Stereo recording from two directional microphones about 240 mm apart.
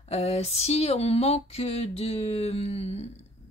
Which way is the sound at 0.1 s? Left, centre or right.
Left.